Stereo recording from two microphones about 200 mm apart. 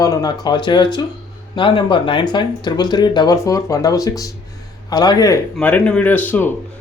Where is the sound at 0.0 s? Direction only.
20° left (ahead or behind).